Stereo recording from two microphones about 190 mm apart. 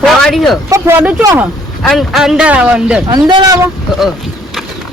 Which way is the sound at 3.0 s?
20° right (ahead or behind).